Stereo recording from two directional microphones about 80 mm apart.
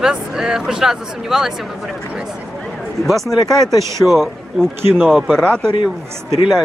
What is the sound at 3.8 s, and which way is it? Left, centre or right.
Speech, right.